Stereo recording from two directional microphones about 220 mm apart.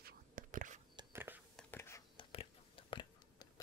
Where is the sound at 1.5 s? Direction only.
10° left (ahead or behind).